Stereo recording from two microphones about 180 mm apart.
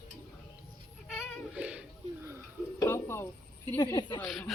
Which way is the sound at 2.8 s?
15° left (ahead or behind).